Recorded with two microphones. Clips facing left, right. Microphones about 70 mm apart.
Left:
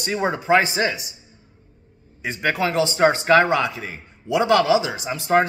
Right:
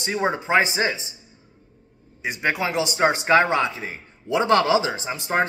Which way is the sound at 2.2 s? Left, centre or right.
Centre.